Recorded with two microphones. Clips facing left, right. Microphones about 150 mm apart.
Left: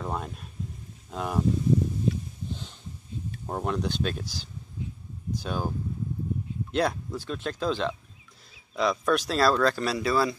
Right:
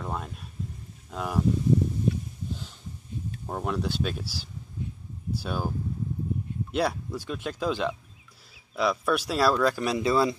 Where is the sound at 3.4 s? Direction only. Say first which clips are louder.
Left 1 dB; 5° left (ahead or behind).